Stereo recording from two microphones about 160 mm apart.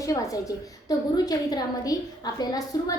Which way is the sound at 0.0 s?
20° left (ahead or behind).